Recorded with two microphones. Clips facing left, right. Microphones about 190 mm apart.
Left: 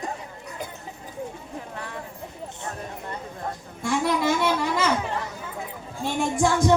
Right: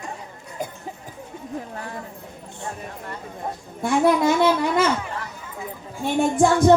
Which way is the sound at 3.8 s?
60° right (ahead or behind).